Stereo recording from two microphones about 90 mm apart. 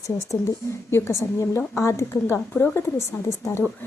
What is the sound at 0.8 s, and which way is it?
A woman's voice, 30° left (ahead or behind).